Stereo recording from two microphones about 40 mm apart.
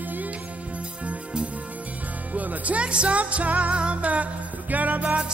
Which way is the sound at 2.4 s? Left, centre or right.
Right.